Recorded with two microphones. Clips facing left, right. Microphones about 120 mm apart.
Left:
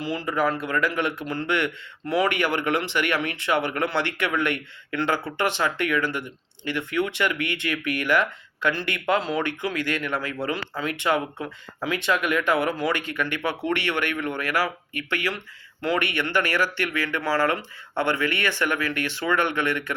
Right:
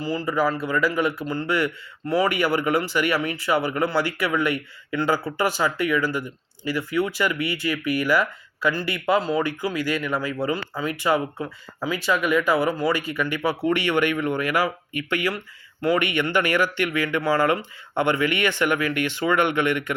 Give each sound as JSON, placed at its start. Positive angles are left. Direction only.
{"t": 0.0, "sound": "speech", "side_deg": 0}